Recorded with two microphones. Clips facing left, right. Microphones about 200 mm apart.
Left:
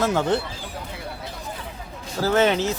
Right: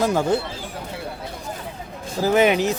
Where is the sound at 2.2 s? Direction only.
15° right (ahead or behind).